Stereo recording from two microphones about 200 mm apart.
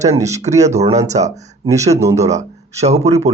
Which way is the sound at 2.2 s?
35° right (ahead or behind).